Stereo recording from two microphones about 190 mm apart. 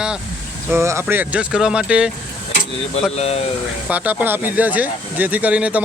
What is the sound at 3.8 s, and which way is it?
Speech, 10° right (ahead or behind).